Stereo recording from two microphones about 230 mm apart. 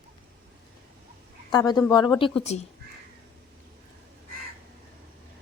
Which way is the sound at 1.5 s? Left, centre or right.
Centre.